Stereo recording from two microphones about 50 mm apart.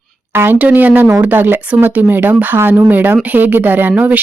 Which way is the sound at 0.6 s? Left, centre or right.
Right.